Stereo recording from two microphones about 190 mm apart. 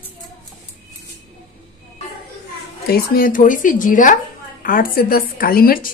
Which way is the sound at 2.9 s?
50° left (ahead or behind).